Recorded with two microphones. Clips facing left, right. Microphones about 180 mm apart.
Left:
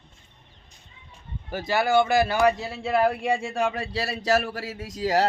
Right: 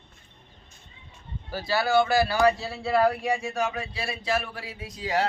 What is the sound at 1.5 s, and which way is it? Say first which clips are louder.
Speech: left 2 dB; 20° left (ahead or behind).